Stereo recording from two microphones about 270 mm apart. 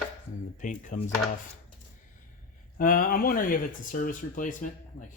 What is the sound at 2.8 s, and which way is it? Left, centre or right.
Speech, left.